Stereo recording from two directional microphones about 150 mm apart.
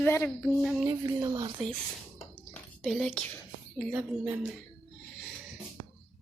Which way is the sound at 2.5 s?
Centre (ahead or behind).